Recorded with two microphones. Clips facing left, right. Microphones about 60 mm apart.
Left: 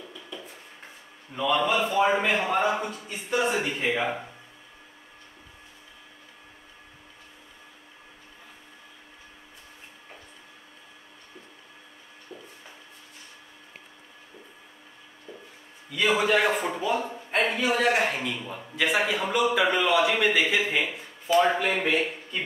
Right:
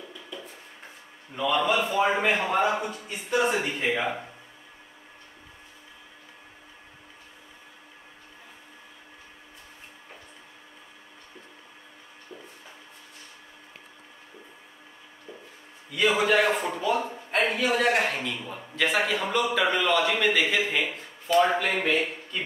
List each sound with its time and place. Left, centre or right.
1.3 s a man's voice: centre
15.9 s a sound: centre
21.8 s speech: centre